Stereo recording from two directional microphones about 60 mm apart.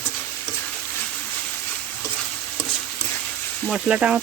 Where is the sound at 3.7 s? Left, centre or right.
Centre.